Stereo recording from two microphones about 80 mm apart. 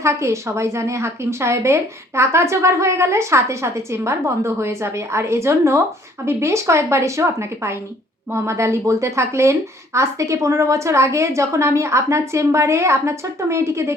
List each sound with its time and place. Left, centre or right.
0.0 s a woman's voice: right